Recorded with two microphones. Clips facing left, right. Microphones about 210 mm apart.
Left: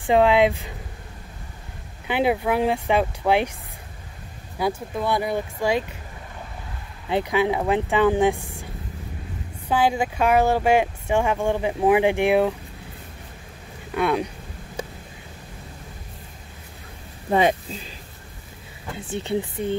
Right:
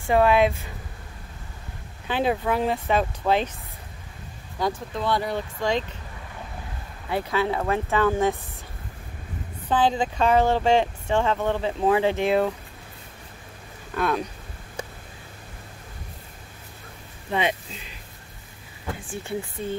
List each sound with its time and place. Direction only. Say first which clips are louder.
0.0 s speech: left 2 dB; 15° left (ahead or behind)
2.0 s speech: left 2 dB; 15° left (ahead or behind)
4.6 s speech: left 2 dB; 10° left (ahead or behind)
7.1 s speech: left 3 dB; 20° left (ahead or behind)
9.7 s speech: left 1 dB; 10° left (ahead or behind)
13.9 s speech: left 3 dB; 10° left (ahead or behind)
17.3 s speech: left 6 dB; 40° left (ahead or behind)
18.9 s speech: left 7 dB; 20° left (ahead or behind)